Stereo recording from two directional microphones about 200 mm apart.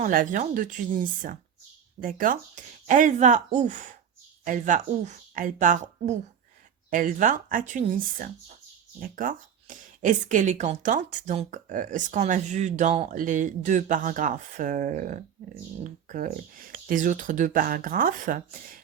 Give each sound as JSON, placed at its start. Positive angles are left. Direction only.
{"t": 0.0, "sound": "speech", "side_deg": -40}